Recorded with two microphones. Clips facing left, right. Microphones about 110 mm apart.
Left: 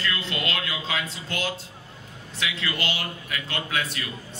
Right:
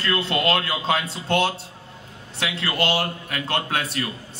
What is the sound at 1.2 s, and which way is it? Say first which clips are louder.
Speech: right 13 dB; 65° right (ahead or behind).